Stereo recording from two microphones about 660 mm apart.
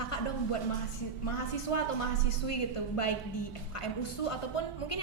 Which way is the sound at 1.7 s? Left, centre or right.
Left.